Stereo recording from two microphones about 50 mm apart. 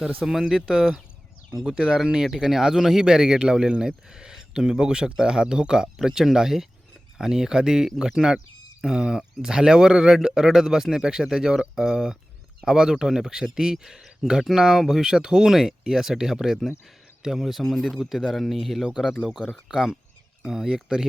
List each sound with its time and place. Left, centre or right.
0.2 s speech: centre